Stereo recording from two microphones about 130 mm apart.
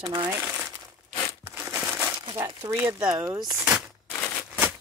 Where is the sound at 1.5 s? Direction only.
10° right (ahead or behind).